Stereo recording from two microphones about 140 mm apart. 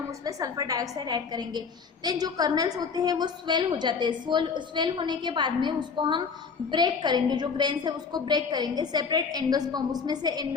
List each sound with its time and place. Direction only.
0.3 s a woman's voice: 25° right (ahead or behind)